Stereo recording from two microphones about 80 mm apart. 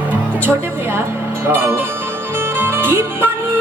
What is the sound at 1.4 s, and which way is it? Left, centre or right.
Speech, right.